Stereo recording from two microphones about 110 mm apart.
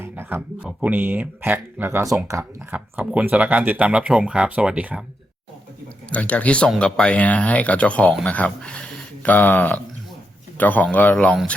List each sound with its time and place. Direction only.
0.0 s speech: 20° right (ahead or behind)
6.1 s speech: 10° left (ahead or behind)